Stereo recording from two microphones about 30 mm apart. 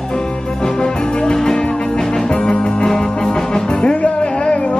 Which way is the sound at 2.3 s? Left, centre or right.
Left.